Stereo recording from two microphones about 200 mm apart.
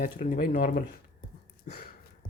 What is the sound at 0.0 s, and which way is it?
Speech, 45° left (ahead or behind).